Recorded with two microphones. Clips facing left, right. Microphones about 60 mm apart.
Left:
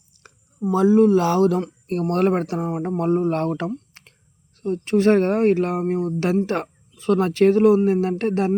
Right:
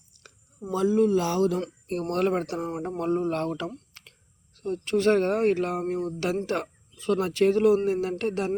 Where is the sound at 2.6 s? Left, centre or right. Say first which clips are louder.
Left 6 dB; centre.